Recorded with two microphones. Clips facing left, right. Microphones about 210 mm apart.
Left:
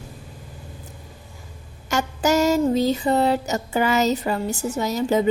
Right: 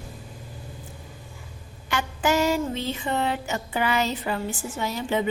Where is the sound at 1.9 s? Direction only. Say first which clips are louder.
Left 4 dB; 40° left (ahead or behind).